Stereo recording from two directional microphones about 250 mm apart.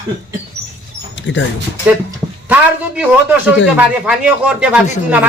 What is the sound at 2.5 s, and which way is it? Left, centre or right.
Speech, centre.